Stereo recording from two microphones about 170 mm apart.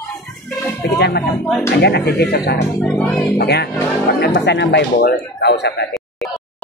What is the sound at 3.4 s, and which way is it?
Speech, 70° left (ahead or behind).